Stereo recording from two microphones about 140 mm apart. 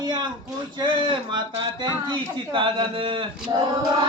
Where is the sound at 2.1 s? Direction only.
35° right (ahead or behind).